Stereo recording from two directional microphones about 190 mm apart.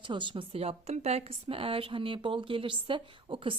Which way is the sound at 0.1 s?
25° right (ahead or behind).